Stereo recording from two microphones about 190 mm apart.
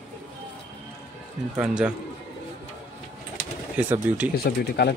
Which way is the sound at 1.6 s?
5° right (ahead or behind).